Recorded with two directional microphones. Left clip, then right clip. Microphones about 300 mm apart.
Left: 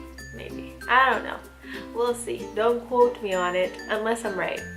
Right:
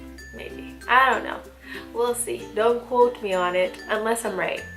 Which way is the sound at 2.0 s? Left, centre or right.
Centre.